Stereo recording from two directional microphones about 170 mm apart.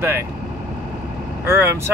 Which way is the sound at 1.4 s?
15° right (ahead or behind).